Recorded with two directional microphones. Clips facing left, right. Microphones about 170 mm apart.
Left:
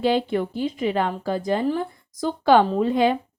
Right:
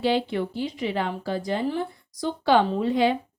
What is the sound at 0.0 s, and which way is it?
Speech, 50° left (ahead or behind).